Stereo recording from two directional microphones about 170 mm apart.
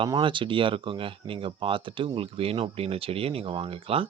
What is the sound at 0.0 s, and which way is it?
Speech, 30° right (ahead or behind).